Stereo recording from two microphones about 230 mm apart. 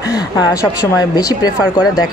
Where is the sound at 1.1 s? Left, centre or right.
Centre.